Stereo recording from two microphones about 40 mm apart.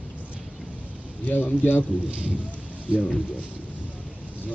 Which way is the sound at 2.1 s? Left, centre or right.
Right.